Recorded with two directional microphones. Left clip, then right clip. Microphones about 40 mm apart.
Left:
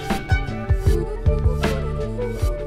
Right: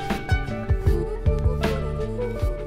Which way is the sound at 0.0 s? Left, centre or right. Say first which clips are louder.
Left 2 dB; right.